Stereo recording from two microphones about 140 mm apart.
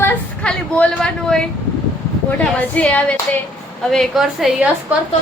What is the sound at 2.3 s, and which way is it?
A woman's voice, 10° left (ahead or behind).